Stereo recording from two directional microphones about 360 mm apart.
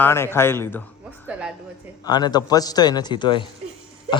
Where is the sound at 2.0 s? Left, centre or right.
Centre.